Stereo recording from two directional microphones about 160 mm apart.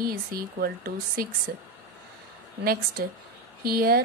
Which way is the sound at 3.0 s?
70° right (ahead or behind).